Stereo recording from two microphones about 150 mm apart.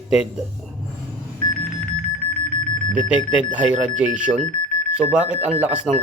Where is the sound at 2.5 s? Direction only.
55° right (ahead or behind).